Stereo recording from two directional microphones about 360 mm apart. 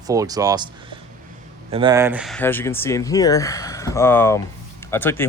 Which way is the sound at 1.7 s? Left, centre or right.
Centre.